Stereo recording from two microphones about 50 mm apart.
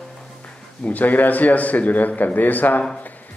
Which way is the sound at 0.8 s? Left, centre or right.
Left.